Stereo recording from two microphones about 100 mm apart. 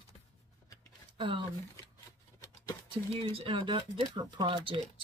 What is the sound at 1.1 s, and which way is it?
Speech, 55° right (ahead or behind).